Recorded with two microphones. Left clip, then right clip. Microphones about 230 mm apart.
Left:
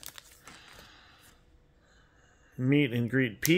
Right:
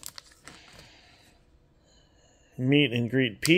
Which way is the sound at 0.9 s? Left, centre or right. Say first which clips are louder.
Even; left.